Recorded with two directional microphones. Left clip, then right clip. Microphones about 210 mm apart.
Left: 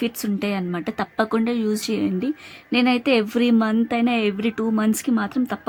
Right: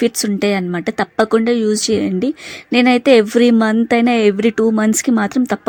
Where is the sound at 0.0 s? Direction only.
25° right (ahead or behind).